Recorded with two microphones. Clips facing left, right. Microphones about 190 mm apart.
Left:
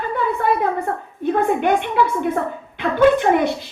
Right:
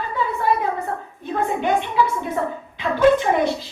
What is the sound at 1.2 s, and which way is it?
A woman's voice, 60° left (ahead or behind).